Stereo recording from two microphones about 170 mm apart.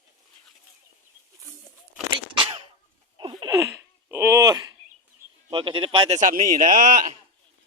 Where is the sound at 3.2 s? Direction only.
30° right (ahead or behind).